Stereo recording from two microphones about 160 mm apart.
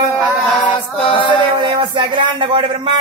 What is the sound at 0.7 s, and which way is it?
Music, 30° left (ahead or behind).